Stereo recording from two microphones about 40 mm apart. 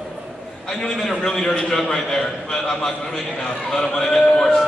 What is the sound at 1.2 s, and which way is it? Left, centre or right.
A man's voice, centre.